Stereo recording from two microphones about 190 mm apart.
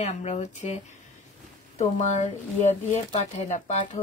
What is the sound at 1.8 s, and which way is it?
Speech, 40° left (ahead or behind).